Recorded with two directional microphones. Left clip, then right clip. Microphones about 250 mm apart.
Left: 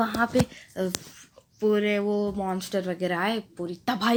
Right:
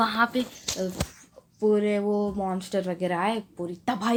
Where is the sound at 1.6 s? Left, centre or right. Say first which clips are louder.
Even; centre.